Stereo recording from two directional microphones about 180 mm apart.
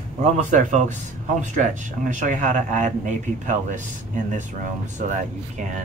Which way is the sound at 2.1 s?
45° right (ahead or behind).